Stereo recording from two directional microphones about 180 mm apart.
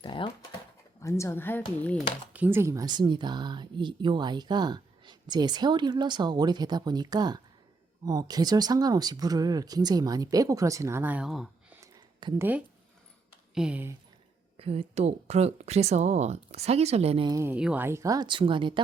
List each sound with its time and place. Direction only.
0.0 s dog: 25° left (ahead or behind)
1.0 s a woman's voice: 15° left (ahead or behind)
2.3 s speech: 10° right (ahead or behind)
11.8 s a sound: 15° right (ahead or behind)
13.5 s speech: 5° right (ahead or behind)
14.6 s speech: 30° right (ahead or behind)
17.3 s speech: 10° right (ahead or behind); by 18.8 s 25° right (ahead or behind)